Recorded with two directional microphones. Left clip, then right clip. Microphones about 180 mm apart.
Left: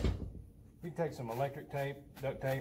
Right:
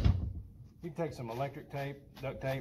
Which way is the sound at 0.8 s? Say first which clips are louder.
Even; 15° right (ahead or behind).